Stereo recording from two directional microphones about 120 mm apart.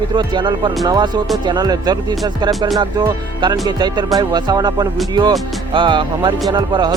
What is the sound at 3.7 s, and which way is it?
Speech, 35° right (ahead or behind).